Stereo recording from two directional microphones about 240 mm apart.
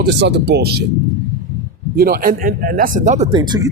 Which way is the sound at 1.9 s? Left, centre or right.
Right.